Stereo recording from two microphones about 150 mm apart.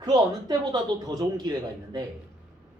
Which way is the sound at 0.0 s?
30° right (ahead or behind).